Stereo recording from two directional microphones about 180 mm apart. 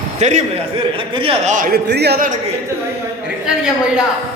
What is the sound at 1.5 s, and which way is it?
Speech, 55° right (ahead or behind).